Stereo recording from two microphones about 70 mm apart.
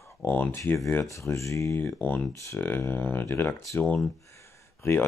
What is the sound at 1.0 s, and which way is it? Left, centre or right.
Speech, left.